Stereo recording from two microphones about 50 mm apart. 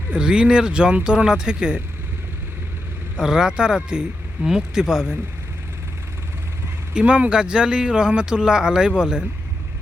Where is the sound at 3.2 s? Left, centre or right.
Centre.